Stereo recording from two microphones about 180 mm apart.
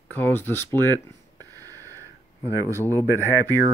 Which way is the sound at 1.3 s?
20° right (ahead or behind).